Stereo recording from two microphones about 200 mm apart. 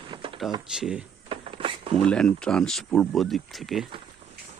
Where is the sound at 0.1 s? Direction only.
25° right (ahead or behind).